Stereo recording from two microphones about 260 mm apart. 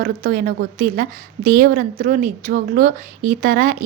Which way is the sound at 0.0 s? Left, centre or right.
Right.